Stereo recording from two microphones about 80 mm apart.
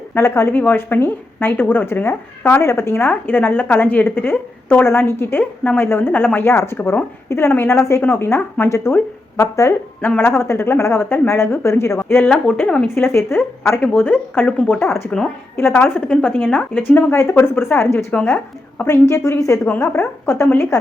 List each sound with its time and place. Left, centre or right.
0.1 s speech: left
12.2 s speech: centre
12.9 s speech: left
18.1 s speech: centre
18.9 s a woman's voice: left